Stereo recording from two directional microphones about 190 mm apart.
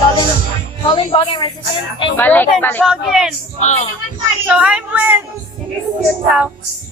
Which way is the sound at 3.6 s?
40° left (ahead or behind).